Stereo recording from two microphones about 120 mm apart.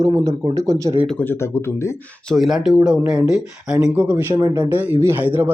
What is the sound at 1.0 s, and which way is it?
Speech, 15° left (ahead or behind).